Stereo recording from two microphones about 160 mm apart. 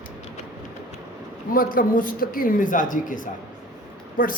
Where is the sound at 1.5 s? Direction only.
60° left (ahead or behind).